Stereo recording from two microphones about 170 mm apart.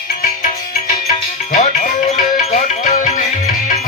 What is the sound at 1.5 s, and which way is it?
Music, 45° left (ahead or behind).